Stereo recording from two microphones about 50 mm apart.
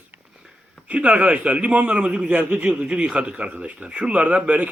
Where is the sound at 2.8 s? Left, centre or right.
Right.